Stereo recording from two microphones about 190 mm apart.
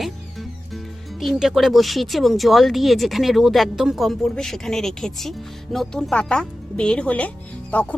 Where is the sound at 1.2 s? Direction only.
Centre (ahead or behind).